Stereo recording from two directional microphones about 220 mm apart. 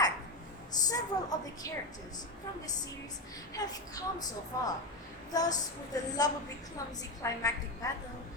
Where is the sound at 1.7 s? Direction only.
15° left (ahead or behind).